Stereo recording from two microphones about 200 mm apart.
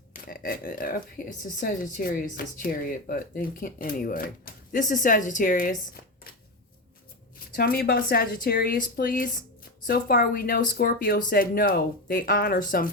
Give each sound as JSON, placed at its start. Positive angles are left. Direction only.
{"t": 0.1, "sound": "speech", "side_deg": 45}
{"t": 7.5, "sound": "speech", "side_deg": 50}